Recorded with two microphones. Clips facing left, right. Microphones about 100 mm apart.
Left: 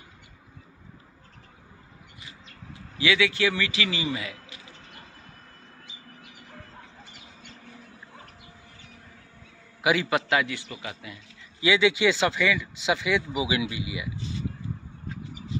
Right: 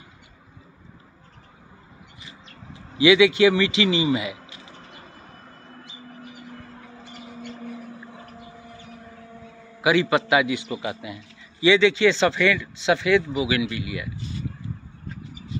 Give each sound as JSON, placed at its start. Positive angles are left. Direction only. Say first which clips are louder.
{"t": 3.0, "sound": "a man's voice", "louder": "right 9 dB", "side_deg": -15}
{"t": 9.8, "sound": "a man's voice", "louder": "right 4 dB", "side_deg": 0}
{"t": 11.6, "sound": "a man's voice", "louder": "right 4 dB", "side_deg": 5}